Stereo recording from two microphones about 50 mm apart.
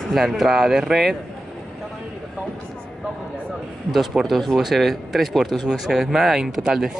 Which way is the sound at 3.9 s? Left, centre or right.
Centre.